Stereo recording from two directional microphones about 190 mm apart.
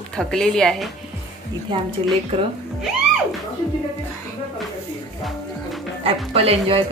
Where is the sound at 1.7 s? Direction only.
25° right (ahead or behind).